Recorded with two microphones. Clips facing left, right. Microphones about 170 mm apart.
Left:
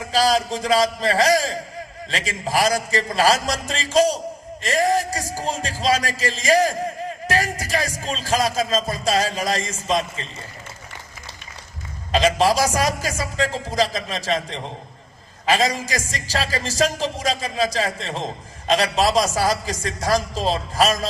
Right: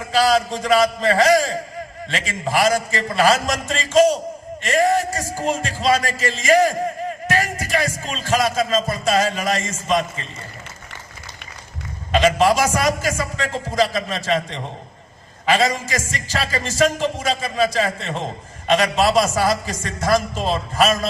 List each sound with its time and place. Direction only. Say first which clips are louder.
0.1 s a sound: right 2 dB; 35° left (ahead or behind)
0.6 s music: right 2 dB; 35° left (ahead or behind)
4.6 s a man's voice: right 2 dB; 40° left (ahead or behind)
5.5 s music: right 3 dB; 35° left (ahead or behind)
12.1 s music: right 2 dB; 35° left (ahead or behind)